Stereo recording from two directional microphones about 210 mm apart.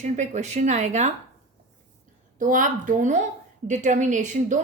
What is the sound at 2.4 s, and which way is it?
A woman's voice, 40° right (ahead or behind).